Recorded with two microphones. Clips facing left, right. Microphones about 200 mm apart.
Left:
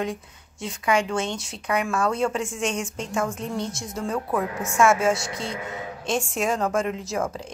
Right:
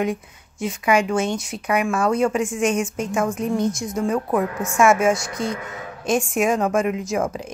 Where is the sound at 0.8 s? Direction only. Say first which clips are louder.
Right 4 dB; 5° right (ahead or behind).